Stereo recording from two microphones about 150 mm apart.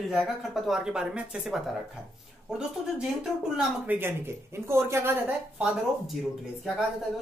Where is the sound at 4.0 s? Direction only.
15° right (ahead or behind).